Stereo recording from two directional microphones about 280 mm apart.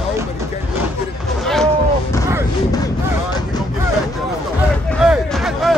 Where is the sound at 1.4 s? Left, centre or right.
Centre.